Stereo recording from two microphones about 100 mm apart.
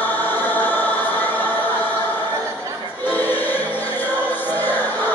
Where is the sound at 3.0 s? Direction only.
20° left (ahead or behind).